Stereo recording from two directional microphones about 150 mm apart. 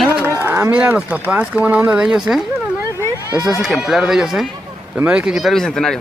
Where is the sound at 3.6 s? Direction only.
Centre (ahead or behind).